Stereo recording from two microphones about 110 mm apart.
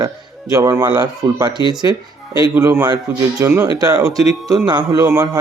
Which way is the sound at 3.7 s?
35° right (ahead or behind).